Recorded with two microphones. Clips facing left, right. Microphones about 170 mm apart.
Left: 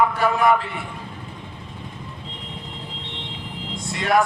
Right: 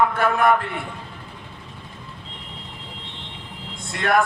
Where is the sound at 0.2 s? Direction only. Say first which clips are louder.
Even; 55° right (ahead or behind).